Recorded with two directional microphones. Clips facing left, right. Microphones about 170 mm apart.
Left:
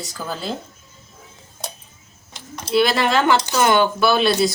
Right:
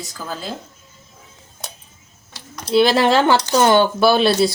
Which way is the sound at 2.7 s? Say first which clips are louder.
Right 3 dB; 30° right (ahead or behind).